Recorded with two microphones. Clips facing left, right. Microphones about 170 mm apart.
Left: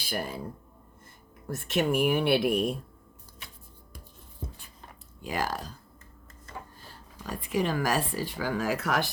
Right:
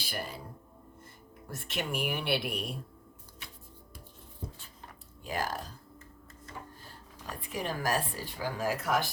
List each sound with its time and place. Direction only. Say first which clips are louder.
0.1 s speech: left 6 dB; 50° left (ahead or behind)
1.5 s speech: left 9 dB; 45° left (ahead or behind)
5.2 s speech: left 3 dB; 90° left
7.5 s speech: left 5 dB; 90° left